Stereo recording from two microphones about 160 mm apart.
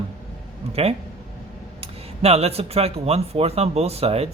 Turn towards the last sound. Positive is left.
turn(degrees=-40)  # may be behind; listen again after turning